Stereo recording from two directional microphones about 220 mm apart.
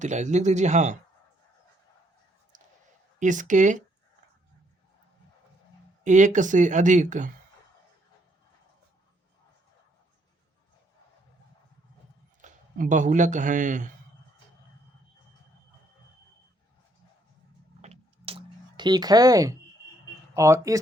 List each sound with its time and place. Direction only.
0.0 s speech: 30° right (ahead or behind)
3.2 s speech: 35° right (ahead or behind)
6.1 s speech: 35° right (ahead or behind)
12.4 s speech: 35° right (ahead or behind)
17.8 s a sound: 25° right (ahead or behind)
20.3 s speech: 15° right (ahead or behind)